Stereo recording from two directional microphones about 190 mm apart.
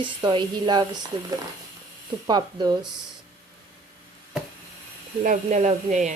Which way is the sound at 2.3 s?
25° right (ahead or behind).